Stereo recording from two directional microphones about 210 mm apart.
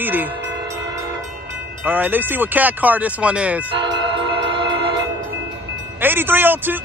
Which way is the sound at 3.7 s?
25° right (ahead or behind).